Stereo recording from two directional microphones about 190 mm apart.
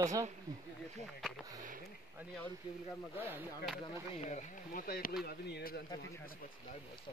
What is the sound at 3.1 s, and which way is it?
Speech, 10° right (ahead or behind).